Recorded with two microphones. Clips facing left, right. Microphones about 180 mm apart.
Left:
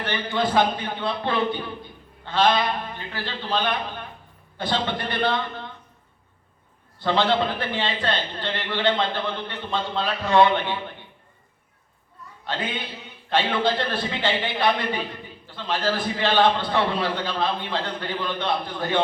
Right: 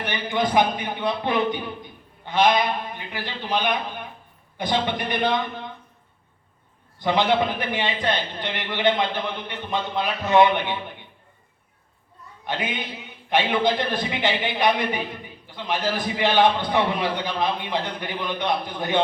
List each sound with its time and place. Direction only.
0.0 s a man's voice: 15° right (ahead or behind)
7.0 s a man's voice: 15° right (ahead or behind)
12.5 s a man's voice: 15° right (ahead or behind)